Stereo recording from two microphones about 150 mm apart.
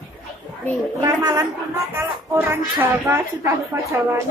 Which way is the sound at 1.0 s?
25° right (ahead or behind).